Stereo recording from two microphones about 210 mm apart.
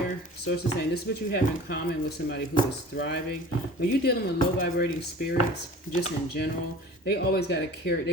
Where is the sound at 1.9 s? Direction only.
50° left (ahead or behind).